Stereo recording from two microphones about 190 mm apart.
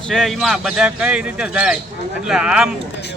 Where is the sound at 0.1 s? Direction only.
Centre (ahead or behind).